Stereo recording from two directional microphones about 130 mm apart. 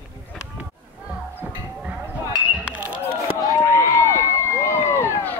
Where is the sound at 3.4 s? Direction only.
25° left (ahead or behind).